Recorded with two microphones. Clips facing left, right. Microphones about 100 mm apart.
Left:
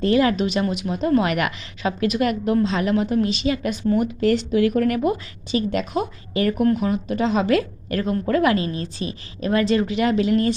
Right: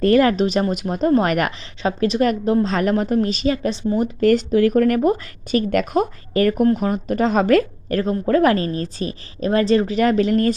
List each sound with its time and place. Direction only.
0.0 s a woman's voice: 45° right (ahead or behind)
2.7 s a woman's voice: 45° right (ahead or behind)